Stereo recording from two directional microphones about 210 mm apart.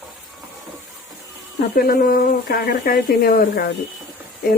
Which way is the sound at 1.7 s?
45° left (ahead or behind).